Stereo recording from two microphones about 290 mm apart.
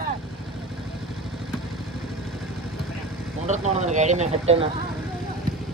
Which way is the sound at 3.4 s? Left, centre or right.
Right.